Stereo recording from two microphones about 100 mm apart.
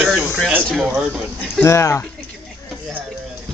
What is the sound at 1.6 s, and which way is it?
Speech, 30° left (ahead or behind).